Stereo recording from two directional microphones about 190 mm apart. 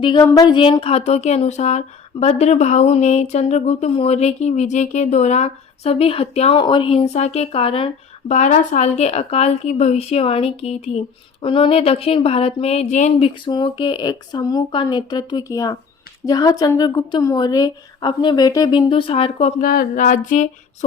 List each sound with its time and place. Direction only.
0.0 s speech: 25° left (ahead or behind); by 20.5 s 40° left (ahead or behind)